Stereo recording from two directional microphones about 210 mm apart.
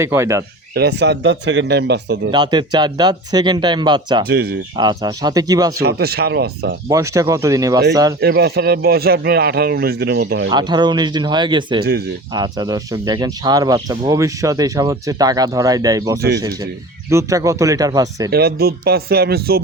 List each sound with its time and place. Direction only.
0.0 s speech: 10° right (ahead or behind)
0.7 s speech: 50° right (ahead or behind)
2.3 s speech: 20° right (ahead or behind)
4.3 s speech: 50° right (ahead or behind)
4.8 s speech: 20° right (ahead or behind)
5.8 s speech: 50° right (ahead or behind)
6.9 s speech: 15° right (ahead or behind)
8.2 s speech: 50° right (ahead or behind)
10.5 s speech: 20° right (ahead or behind)
18.3 s speech: 50° right (ahead or behind)